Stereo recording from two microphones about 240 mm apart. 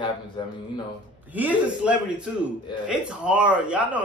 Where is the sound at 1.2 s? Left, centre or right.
Centre.